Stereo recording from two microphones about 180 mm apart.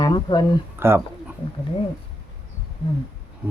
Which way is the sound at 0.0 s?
25° left (ahead or behind).